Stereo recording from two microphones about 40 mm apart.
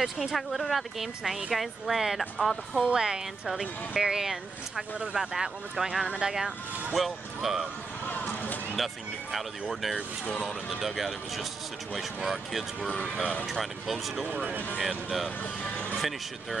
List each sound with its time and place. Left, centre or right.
0.0 s speech: centre
2.8 s speech: centre
3.4 s speech: centre
8.1 s a sound: left
8.7 s speech: centre
13.0 s speech: right
13.5 s speech: centre
14.3 s speech: right
14.8 s speech: centre